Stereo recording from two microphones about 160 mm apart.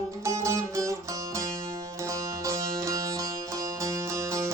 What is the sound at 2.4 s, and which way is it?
Music, 20° right (ahead or behind).